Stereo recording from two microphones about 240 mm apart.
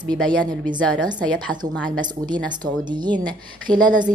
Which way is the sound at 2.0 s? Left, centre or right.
Centre.